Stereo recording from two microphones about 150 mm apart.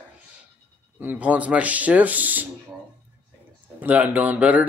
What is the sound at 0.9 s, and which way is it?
Speech, 10° right (ahead or behind).